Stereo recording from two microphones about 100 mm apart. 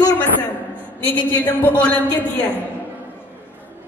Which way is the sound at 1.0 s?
20° left (ahead or behind).